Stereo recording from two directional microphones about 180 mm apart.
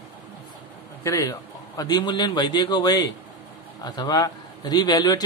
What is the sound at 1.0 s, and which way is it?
A man's voice, 20° left (ahead or behind).